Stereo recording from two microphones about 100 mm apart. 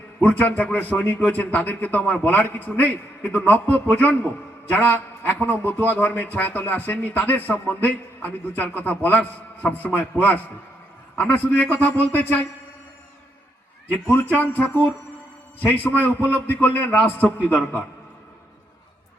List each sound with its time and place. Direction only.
0.2 s a man's voice: 15° left (ahead or behind)
13.9 s a man's voice: 20° left (ahead or behind)